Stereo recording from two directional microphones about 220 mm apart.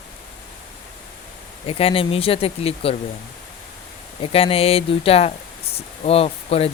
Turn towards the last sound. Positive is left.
turn(degrees=25)  # may be behind; listen again after turning